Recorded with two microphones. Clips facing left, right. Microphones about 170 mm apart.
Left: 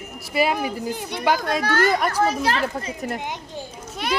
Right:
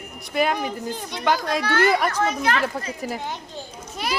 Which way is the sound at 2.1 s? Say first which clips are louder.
Left 1 dB; 35° left (ahead or behind).